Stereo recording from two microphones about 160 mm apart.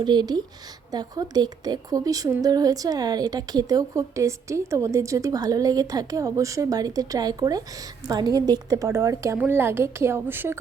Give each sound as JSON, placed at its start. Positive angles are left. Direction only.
{"t": 0.0, "sound": "a woman's voice", "side_deg": -25}